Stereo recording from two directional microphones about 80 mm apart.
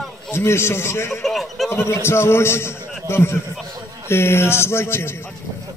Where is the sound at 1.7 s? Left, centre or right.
Left.